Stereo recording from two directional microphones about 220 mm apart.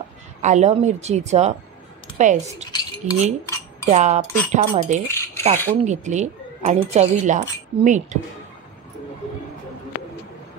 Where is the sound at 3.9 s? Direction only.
30° right (ahead or behind).